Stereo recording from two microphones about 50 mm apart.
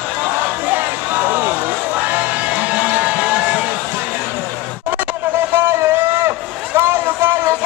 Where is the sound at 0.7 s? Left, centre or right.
Right.